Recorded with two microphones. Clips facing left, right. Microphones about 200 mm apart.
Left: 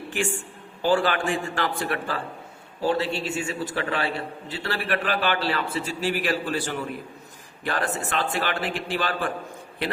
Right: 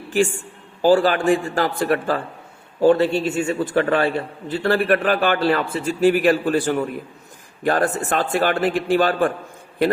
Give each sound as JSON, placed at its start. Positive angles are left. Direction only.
{"t": 0.8, "sound": "a man's voice", "side_deg": -40}